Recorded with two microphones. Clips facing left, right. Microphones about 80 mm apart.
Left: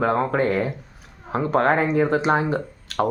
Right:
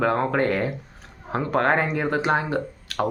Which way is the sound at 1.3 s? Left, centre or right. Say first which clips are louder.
Left 2 dB; left.